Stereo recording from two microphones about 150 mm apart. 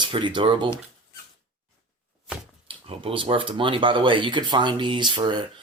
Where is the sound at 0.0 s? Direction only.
35° right (ahead or behind).